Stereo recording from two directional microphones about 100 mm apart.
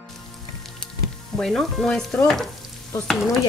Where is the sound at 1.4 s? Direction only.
5° left (ahead or behind).